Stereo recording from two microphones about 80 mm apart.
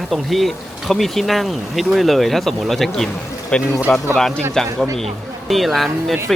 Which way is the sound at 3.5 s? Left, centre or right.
Centre.